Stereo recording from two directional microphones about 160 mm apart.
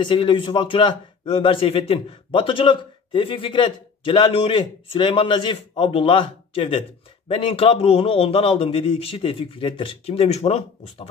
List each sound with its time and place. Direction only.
0.0 s a man's voice: 30° left (ahead or behind)